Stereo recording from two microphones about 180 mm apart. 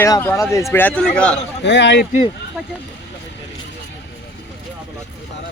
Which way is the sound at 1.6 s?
80° left.